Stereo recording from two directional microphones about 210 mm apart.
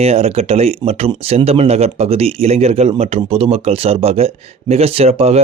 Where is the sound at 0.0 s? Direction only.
30° right (ahead or behind).